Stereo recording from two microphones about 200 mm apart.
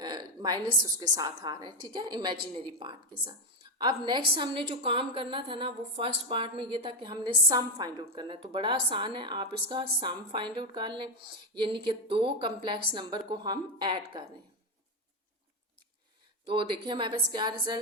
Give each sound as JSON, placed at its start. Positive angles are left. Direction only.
{"t": 0.0, "sound": "a woman's voice", "side_deg": -20}
{"t": 16.8, "sound": "a woman's voice", "side_deg": -25}